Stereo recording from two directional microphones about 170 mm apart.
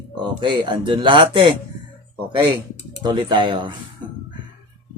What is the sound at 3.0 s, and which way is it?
Speech, 30° right (ahead or behind).